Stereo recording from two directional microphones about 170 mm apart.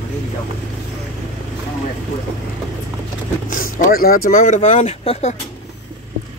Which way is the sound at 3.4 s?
50° left (ahead or behind).